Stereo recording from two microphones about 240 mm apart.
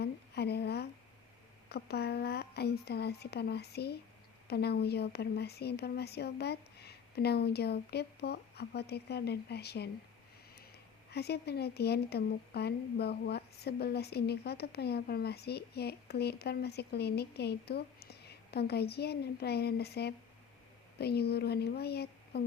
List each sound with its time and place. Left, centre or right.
0.0 s a sound: left
1.7 s speech: left
11.1 s speech: left